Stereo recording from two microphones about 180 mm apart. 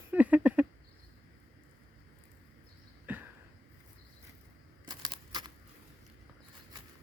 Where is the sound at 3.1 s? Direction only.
10° right (ahead or behind).